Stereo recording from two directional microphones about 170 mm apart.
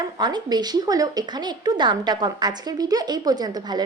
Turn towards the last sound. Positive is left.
turn(degrees=-25)  # may be behind; listen again after turning